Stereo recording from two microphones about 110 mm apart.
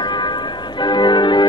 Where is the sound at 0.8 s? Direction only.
45° left (ahead or behind).